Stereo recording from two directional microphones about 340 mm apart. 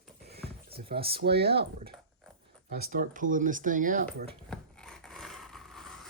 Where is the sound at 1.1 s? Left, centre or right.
Right.